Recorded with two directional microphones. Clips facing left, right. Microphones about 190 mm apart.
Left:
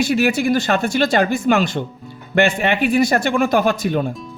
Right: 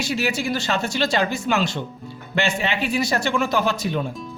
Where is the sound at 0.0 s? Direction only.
55° left (ahead or behind).